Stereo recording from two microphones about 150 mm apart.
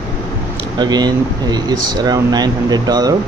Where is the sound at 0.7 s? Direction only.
30° right (ahead or behind).